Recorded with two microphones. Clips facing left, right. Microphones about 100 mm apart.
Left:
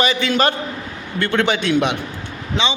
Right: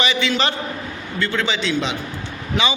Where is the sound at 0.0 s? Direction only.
45° left (ahead or behind).